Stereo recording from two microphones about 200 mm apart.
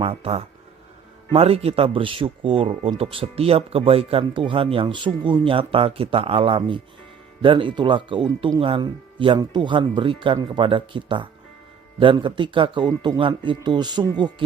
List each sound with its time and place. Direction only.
0.0 s speech: 30° right (ahead or behind)